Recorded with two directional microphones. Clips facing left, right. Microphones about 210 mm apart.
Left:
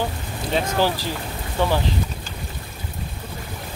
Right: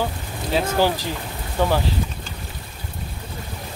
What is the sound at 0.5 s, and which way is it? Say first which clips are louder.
Speech: right 1 dB; 5° right (ahead or behind).